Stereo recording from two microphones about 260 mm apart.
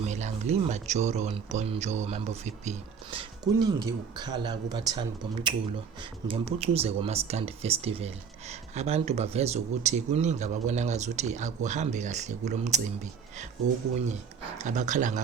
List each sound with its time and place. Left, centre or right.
0.1 s speech: right
14.6 s speech: right